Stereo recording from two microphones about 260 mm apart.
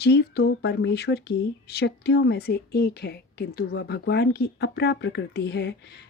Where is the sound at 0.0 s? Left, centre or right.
Left.